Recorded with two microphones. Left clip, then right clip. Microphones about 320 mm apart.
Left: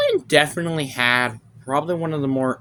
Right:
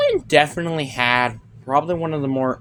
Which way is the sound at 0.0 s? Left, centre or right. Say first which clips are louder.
Right 1 dB; left.